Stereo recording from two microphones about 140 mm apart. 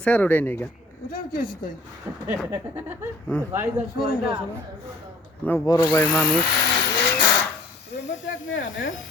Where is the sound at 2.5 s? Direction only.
15° right (ahead or behind).